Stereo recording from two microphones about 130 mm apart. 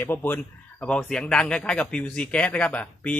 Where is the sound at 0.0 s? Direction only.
15° left (ahead or behind).